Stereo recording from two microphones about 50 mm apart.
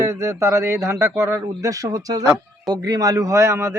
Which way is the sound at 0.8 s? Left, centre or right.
Right.